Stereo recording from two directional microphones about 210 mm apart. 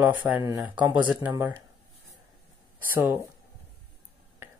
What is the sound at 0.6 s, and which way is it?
Speech, 5° right (ahead or behind).